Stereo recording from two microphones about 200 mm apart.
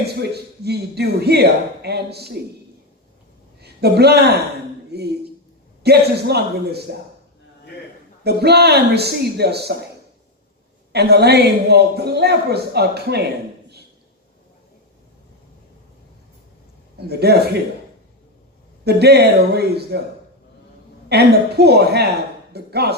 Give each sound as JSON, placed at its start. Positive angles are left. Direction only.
{"t": 0.0, "sound": "a woman's voice", "side_deg": -55}
{"t": 3.6, "sound": "a man's voice", "side_deg": -55}
{"t": 8.2, "sound": "a woman's voice", "side_deg": -55}
{"t": 10.9, "sound": "a woman's voice", "side_deg": -55}
{"t": 17.1, "sound": "a woman's voice", "side_deg": -55}
{"t": 18.9, "sound": "a woman's voice", "side_deg": -55}
{"t": 21.1, "sound": "a woman's voice", "side_deg": -55}